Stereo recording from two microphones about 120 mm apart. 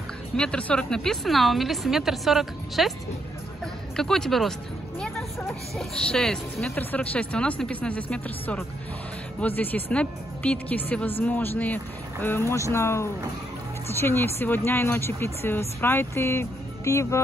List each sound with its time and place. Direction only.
0.4 s a woman's voice: 10° left (ahead or behind)
3.9 s a woman's voice: 5° left (ahead or behind); by 17.2 s 25° left (ahead or behind)